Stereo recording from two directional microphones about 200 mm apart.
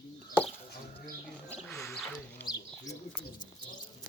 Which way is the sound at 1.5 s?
10° left (ahead or behind).